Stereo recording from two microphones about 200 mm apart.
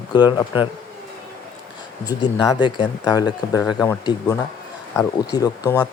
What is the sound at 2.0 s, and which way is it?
Speech, 20° left (ahead or behind).